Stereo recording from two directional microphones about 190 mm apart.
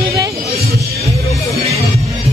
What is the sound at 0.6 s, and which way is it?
Music, 35° right (ahead or behind).